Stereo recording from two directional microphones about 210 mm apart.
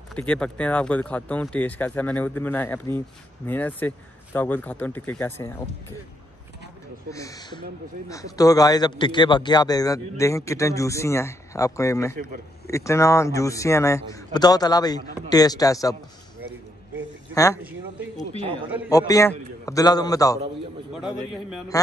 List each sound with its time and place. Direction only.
0.1 s a man's voice: 5° left (ahead or behind)
7.1 s a man's voice: 15° left (ahead or behind)
17.3 s a woman's voice: 15° left (ahead or behind)
18.9 s a man's voice: 15° left (ahead or behind)
20.9 s a man's voice: 5° right (ahead or behind)